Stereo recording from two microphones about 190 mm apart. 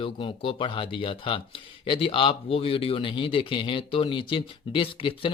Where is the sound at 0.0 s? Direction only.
30° left (ahead or behind).